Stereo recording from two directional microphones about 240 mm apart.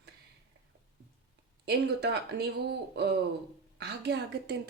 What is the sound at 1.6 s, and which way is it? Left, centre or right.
A woman's voice, right.